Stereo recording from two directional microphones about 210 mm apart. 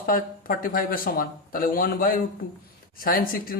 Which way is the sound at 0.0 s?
40° left (ahead or behind).